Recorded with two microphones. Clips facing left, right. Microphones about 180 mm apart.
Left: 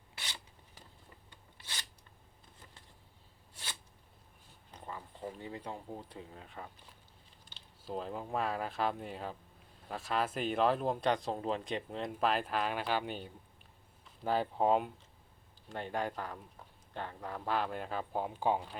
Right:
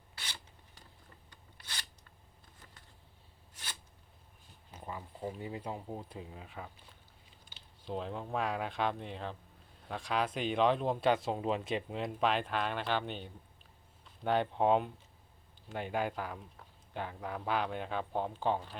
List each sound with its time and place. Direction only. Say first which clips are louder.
1.3 s zipper: even; 25° left (ahead or behind)
4.7 s speech: right 2 dB; 10° right (ahead or behind)
7.8 s speech: right 1 dB; centre (ahead or behind)